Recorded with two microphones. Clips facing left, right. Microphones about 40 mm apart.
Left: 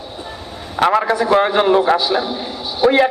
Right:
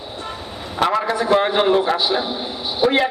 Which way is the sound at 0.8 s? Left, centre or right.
Left.